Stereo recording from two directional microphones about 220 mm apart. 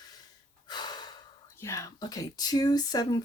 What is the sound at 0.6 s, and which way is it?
Gasp, 20° left (ahead or behind).